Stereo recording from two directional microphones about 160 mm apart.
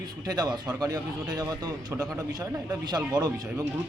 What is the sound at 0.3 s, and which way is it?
Speech, 25° right (ahead or behind).